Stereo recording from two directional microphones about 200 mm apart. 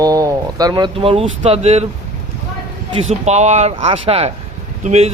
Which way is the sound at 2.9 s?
35° right (ahead or behind).